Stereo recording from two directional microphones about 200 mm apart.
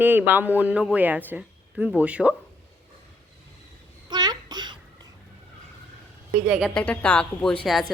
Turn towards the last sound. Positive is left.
turn(degrees=5)  # may be behind; listen again after turning